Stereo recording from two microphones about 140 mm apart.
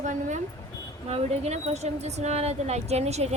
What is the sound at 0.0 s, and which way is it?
Speech, 60° right (ahead or behind).